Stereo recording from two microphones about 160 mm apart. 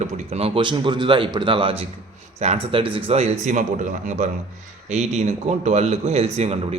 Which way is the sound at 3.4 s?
50° right (ahead or behind).